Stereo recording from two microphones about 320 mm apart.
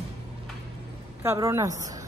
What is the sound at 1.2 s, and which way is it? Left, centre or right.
Speech, centre.